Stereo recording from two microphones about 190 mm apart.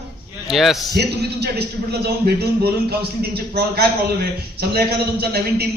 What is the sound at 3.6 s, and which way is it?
A man's voice, 55° right (ahead or behind).